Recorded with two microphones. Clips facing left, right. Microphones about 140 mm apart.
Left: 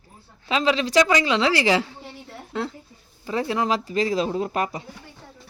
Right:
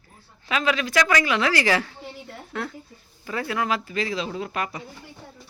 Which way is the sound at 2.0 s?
Centre (ahead or behind).